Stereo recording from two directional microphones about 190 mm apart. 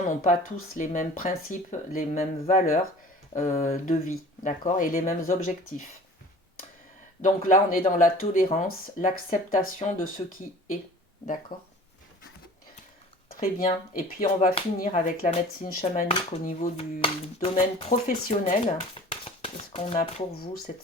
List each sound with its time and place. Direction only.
0.0 s speech: 40° left (ahead or behind)
7.2 s speech: 45° left (ahead or behind)
11.5 s speech: 50° left (ahead or behind)
13.3 s speech: 50° left (ahead or behind); by 20.2 s 30° left (ahead or behind)